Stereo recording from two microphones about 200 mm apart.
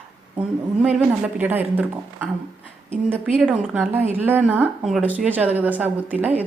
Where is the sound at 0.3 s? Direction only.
5° right (ahead or behind).